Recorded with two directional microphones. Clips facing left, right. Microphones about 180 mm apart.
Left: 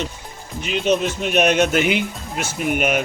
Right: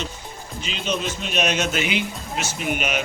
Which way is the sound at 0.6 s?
60° left (ahead or behind).